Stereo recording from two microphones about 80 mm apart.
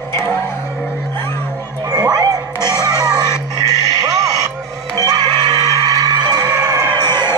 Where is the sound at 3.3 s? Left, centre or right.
Left.